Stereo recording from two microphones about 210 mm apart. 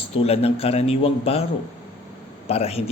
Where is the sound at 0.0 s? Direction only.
30° left (ahead or behind).